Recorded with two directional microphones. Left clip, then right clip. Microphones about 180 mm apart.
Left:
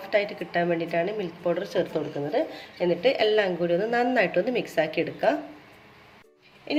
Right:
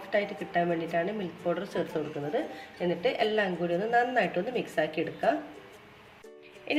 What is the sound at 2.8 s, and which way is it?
A woman's voice, 50° left (ahead or behind).